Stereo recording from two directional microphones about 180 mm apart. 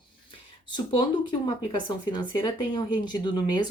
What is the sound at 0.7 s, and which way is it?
Speech, 25° left (ahead or behind).